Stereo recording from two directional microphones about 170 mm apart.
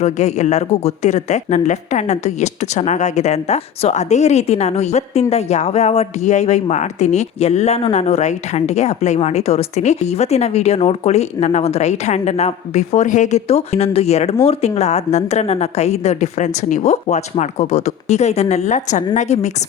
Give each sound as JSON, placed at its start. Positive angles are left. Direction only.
{"t": 0.0, "sound": "a man's voice", "side_deg": 40}